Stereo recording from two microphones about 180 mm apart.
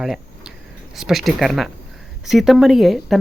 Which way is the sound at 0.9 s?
Centre (ahead or behind).